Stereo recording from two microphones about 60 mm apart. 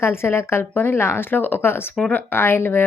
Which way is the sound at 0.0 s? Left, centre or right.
Left.